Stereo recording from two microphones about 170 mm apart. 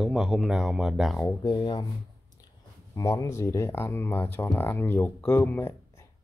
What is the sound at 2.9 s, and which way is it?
Speech, 20° left (ahead or behind).